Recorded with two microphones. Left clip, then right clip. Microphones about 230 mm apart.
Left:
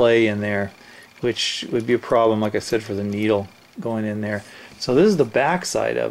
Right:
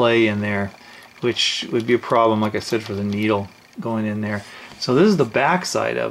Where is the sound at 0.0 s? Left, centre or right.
Centre.